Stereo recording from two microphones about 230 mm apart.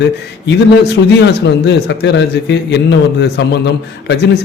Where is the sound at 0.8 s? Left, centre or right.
Left.